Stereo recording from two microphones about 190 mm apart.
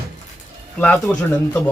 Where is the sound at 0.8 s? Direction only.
10° left (ahead or behind).